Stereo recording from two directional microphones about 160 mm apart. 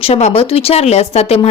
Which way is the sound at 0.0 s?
40° left (ahead or behind).